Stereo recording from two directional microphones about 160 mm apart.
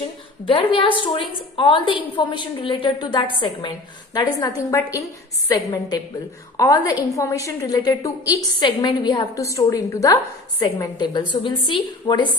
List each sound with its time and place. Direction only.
0.5 s a woman's voice: 35° left (ahead or behind)